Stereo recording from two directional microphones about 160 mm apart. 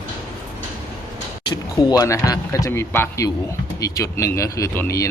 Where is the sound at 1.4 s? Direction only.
25° left (ahead or behind).